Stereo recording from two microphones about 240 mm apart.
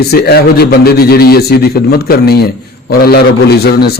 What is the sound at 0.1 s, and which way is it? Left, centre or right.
Speech, left.